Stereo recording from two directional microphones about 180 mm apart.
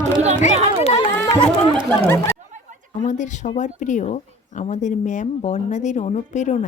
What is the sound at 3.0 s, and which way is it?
A woman's voice, 45° left (ahead or behind).